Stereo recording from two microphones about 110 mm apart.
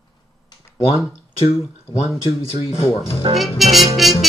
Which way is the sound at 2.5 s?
55° left (ahead or behind).